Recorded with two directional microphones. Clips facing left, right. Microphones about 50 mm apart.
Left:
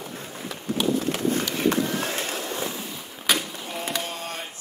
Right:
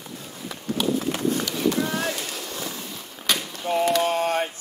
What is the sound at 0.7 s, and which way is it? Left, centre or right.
Horse, centre.